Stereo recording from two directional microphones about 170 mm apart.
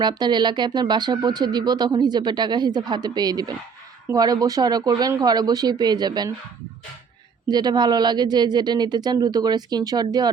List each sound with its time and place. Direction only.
0.0 s speech: 25° right (ahead or behind)
7.4 s speech: 25° right (ahead or behind)